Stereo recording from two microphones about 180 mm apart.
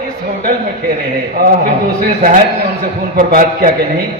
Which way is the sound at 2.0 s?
50° right (ahead or behind).